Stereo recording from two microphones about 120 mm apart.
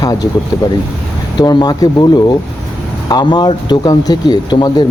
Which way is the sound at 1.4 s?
35° left (ahead or behind).